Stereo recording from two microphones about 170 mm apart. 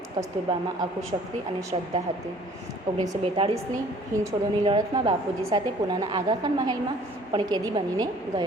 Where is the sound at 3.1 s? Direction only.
35° right (ahead or behind).